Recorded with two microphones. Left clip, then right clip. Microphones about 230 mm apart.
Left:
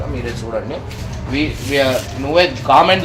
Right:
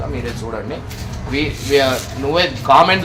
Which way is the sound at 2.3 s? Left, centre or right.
Right.